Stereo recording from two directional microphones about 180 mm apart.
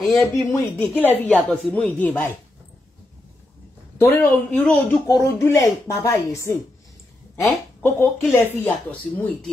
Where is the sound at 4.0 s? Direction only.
10° left (ahead or behind).